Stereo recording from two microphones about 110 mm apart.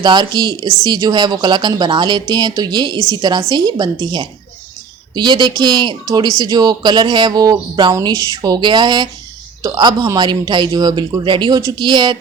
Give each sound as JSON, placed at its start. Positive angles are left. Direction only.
{"t": 0.0, "sound": "speech", "side_deg": -40}